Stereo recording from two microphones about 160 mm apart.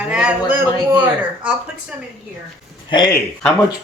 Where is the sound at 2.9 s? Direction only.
25° left (ahead or behind).